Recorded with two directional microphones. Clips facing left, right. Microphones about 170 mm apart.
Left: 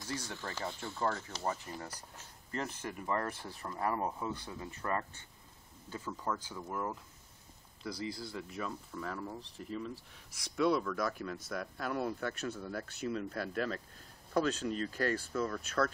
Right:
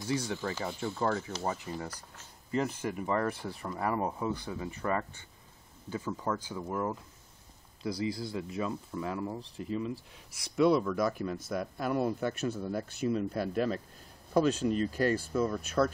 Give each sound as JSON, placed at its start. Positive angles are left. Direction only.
{"t": 0.0, "sound": "speech", "side_deg": -10}